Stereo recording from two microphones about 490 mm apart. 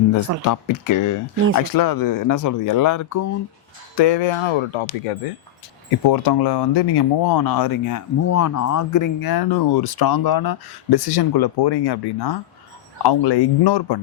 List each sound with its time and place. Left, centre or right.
0.4 s speech: left
3.9 s speech: left
6.1 s speech: left